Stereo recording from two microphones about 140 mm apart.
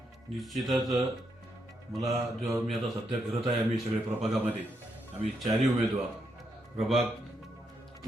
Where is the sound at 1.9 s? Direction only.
20° right (ahead or behind).